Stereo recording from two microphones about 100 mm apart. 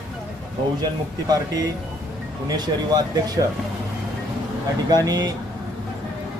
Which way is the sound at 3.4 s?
50° right (ahead or behind).